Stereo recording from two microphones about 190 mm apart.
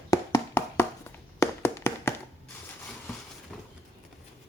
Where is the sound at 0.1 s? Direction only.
15° left (ahead or behind).